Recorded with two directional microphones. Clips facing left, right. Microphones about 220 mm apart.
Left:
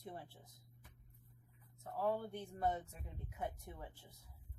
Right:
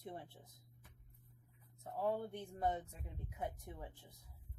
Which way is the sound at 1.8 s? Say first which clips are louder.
Even; 20° right (ahead or behind).